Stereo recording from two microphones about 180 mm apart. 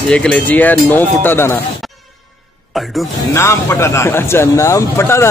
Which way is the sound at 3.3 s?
15° left (ahead or behind).